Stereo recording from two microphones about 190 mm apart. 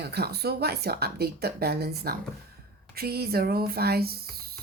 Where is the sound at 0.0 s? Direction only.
60° right (ahead or behind).